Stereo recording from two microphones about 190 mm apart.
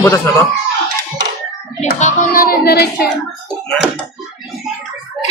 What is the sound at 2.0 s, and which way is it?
Child singing, 40° left (ahead or behind).